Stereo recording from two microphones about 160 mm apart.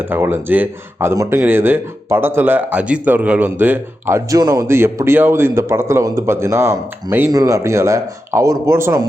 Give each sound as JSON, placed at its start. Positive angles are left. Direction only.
{"t": 0.1, "sound": "a man's voice", "side_deg": -15}